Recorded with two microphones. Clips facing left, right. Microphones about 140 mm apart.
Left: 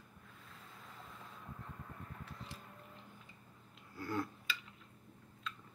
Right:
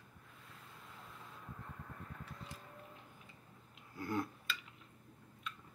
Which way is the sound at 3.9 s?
20° right (ahead or behind).